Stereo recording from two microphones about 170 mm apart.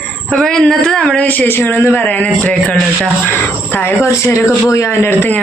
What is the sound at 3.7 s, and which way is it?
Speech, 10° left (ahead or behind).